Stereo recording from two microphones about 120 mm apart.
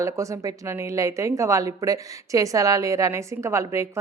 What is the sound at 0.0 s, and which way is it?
A woman's voice, 25° right (ahead or behind).